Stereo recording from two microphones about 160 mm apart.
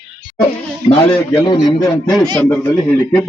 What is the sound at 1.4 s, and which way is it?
Speech, 25° left (ahead or behind).